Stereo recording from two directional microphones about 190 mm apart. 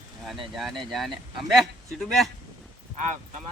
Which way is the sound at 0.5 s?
Centre (ahead or behind).